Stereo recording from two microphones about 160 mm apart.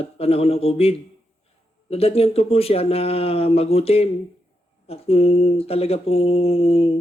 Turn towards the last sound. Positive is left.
turn(degrees=40)  # may be behind; listen again after turning